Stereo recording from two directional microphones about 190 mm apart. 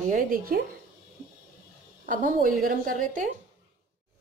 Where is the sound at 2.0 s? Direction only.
45° right (ahead or behind).